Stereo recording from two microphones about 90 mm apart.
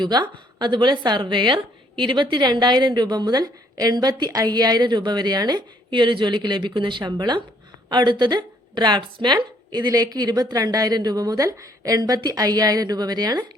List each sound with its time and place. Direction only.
0.0 s a woman's voice: 55° right (ahead or behind)